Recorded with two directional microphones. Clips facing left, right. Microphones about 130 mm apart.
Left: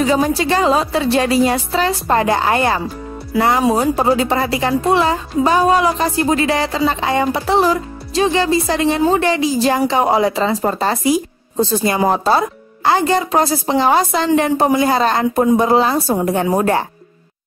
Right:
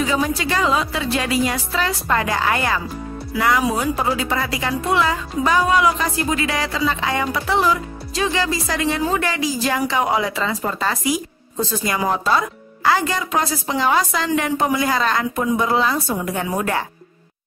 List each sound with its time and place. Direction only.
0.0 s a woman's voice: 35° left (ahead or behind)